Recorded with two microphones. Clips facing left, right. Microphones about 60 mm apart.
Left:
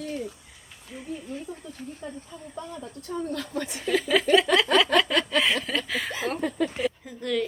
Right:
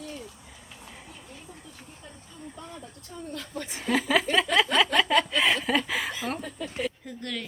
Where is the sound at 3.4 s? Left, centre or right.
Left.